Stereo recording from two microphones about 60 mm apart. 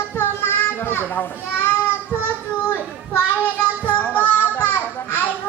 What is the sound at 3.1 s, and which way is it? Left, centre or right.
Children playing, left.